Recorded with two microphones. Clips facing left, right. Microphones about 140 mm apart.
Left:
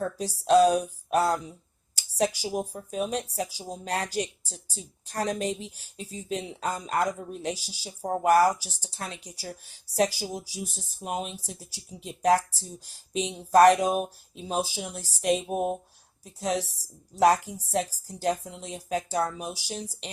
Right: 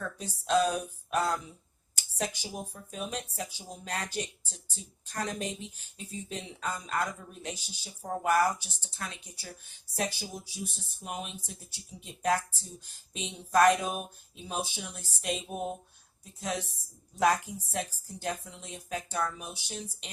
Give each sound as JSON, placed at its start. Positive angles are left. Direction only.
{"t": 0.0, "sound": "speech", "side_deg": 35}
{"t": 15.5, "sound": "a sound", "side_deg": 55}
{"t": 16.2, "sound": "speech", "side_deg": 35}